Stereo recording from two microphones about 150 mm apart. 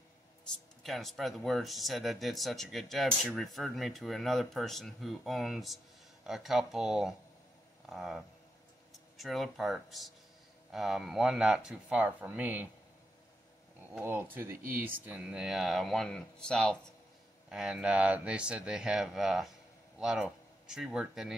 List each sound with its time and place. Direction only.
0.8 s speech: centre (ahead or behind)
14.3 s speech: 15° right (ahead or behind)